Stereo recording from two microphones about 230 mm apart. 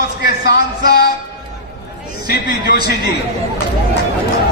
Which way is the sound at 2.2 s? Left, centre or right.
Left.